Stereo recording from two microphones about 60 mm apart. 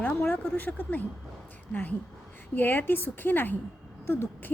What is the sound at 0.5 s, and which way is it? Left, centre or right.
A woman's voice, left.